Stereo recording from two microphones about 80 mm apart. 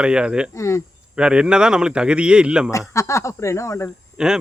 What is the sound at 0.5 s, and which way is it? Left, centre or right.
Speech, left.